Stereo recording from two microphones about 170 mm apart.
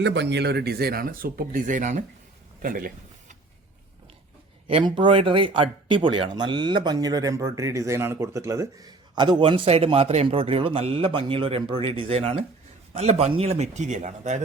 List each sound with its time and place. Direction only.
0.0 s speech: 85° right; by 2.0 s 45° right (ahead or behind)
2.6 s a sound: 55° right (ahead or behind)
4.7 s speech: 30° right (ahead or behind); by 14.4 s 45° right (ahead or behind)